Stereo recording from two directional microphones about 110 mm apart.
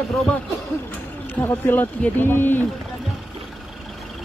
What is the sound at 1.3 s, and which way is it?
Speech, 15° left (ahead or behind).